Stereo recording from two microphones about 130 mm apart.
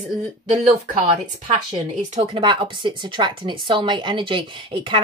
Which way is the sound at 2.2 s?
40° right (ahead or behind).